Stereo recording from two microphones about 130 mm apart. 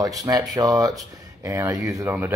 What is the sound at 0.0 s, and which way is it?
Speech, 30° right (ahead or behind).